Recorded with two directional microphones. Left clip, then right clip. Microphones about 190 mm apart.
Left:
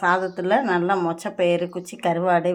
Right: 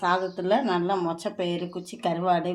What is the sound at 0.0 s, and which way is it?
Speech, 15° left (ahead or behind).